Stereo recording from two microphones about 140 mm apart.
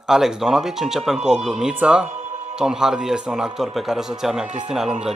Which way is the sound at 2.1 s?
45° right (ahead or behind).